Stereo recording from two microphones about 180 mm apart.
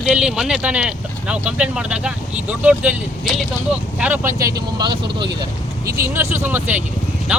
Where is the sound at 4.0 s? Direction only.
10° right (ahead or behind).